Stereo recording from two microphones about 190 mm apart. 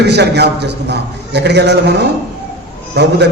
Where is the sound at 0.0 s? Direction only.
60° right (ahead or behind).